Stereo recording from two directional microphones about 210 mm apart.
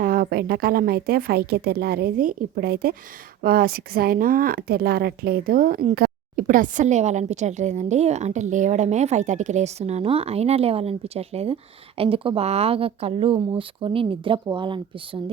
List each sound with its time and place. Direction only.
0.0 s a woman's voice: 45° right (ahead or behind); by 15.2 s 25° right (ahead or behind)